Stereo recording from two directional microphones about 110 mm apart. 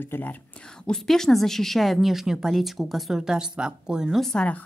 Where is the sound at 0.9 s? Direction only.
5° left (ahead or behind).